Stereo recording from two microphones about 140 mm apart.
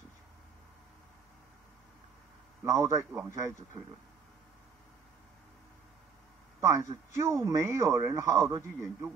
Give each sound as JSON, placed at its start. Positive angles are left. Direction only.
{"t": 2.6, "sound": "a man's voice", "side_deg": -25}
{"t": 6.6, "sound": "a man's voice", "side_deg": -20}